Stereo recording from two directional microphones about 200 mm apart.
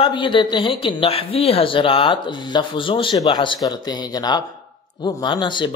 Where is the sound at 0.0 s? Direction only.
25° left (ahead or behind).